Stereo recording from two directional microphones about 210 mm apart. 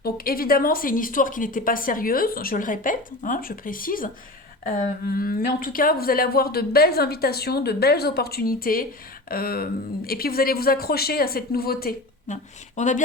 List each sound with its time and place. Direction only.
0.0 s a woman's voice: 45° left (ahead or behind)